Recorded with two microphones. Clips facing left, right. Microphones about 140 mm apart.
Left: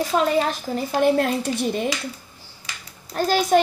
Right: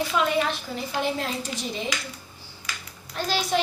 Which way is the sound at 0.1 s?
40° left (ahead or behind).